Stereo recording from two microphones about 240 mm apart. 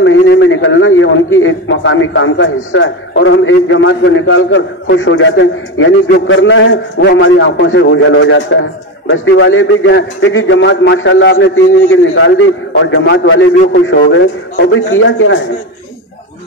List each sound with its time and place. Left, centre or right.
0.0 s a man's voice: left